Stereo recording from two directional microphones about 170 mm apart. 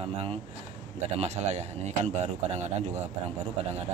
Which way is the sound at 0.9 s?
40° right (ahead or behind).